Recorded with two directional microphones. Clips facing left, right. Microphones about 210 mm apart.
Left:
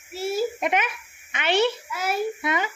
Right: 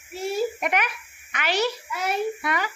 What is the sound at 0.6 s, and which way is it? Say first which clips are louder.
Speech: left 2 dB; 25° left (ahead or behind).